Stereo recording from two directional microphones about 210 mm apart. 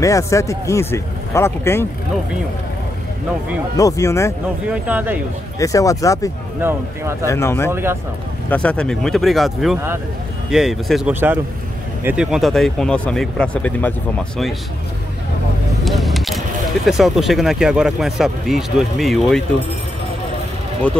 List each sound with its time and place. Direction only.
0.0 s speech: 15° left (ahead or behind)
3.7 s speech: 15° left (ahead or behind)
4.6 s speech: 10° right (ahead or behind)
5.6 s speech: 15° left (ahead or behind)
6.6 s speech: 10° right (ahead or behind)
7.2 s speech: 15° left (ahead or behind)
7.7 s speech: 10° right (ahead or behind)
8.5 s speech: 5° left (ahead or behind)
15.8 s speech: centre (ahead or behind)